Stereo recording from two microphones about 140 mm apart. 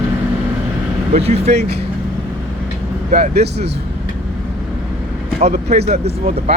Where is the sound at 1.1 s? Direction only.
50° right (ahead or behind).